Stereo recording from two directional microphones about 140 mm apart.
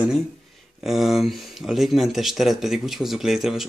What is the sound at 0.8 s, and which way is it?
Speech, centre (ahead or behind).